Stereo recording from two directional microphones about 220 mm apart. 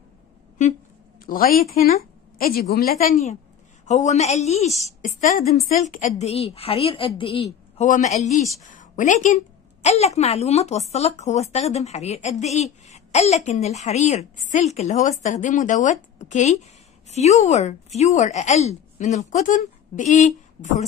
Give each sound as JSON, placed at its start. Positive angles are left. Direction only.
{"t": 1.2, "sound": "a woman's voice", "side_deg": 40}